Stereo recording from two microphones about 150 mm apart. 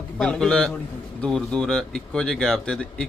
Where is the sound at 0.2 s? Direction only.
5° left (ahead or behind).